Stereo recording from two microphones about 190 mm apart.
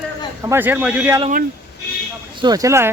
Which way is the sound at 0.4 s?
10° right (ahead or behind).